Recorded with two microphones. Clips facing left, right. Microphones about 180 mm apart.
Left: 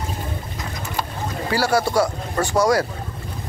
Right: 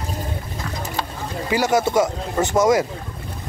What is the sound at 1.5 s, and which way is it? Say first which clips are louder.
Speech: right 1 dB; 20° right (ahead or behind).